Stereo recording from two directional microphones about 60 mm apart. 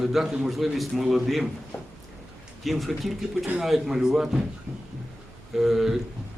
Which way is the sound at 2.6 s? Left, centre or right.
Centre.